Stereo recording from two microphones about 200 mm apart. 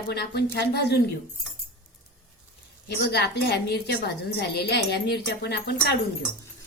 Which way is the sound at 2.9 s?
55° left (ahead or behind).